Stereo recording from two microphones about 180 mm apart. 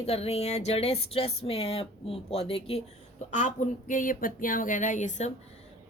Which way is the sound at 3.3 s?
45° left (ahead or behind).